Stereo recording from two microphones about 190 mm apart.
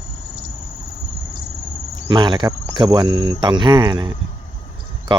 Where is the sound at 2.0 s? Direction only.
25° right (ahead or behind).